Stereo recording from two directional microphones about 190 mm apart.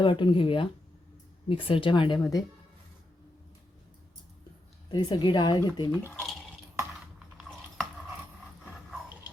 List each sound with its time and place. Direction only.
0.0 s speech: 25° left (ahead or behind)
4.9 s speech: 25° left (ahead or behind)
6.0 s speech: 10° left (ahead or behind)
7.3 s a sound: centre (ahead or behind)